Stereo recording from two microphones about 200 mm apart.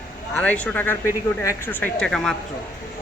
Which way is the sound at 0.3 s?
5° left (ahead or behind).